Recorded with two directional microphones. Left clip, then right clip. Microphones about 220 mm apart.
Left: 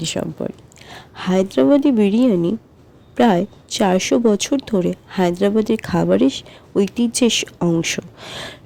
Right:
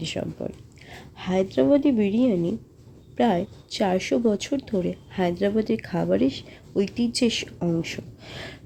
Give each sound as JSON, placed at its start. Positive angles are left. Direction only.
{"t": 0.0, "sound": "a woman's voice", "side_deg": 35}